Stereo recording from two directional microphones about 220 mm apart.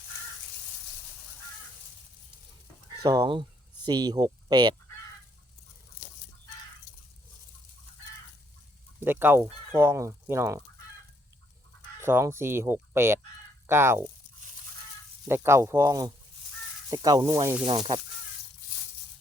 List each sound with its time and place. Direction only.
3.0 s speech: 20° right (ahead or behind)
9.0 s speech: 10° right (ahead or behind)
11.9 s speech: 10° right (ahead or behind)
15.3 s speech: 10° right (ahead or behind)
17.7 s speech: 25° right (ahead or behind)